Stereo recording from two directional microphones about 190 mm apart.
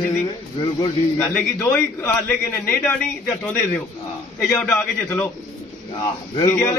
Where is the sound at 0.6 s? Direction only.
25° left (ahead or behind).